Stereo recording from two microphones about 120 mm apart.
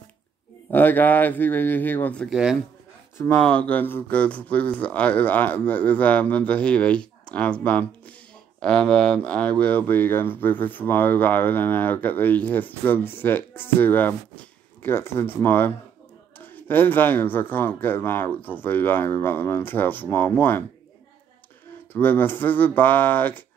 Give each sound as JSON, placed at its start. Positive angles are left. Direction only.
{"t": 0.7, "sound": "speech", "side_deg": 15}
{"t": 2.2, "sound": "speech", "side_deg": -5}
{"t": 3.3, "sound": "speech", "side_deg": 10}
{"t": 21.9, "sound": "speech", "side_deg": 15}